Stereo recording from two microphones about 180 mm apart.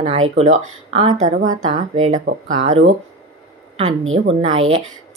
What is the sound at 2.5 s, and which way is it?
Speech, 90° right.